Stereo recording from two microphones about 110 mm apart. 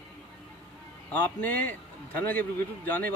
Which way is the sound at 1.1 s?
15° left (ahead or behind).